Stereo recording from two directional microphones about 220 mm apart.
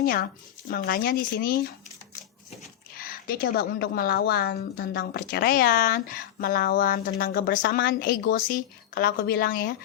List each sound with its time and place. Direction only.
0.0 s speech: 40° left (ahead or behind)
3.0 s a woman's voice: 40° left (ahead or behind)